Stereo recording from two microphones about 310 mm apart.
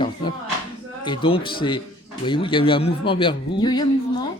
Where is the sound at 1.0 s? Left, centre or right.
Centre.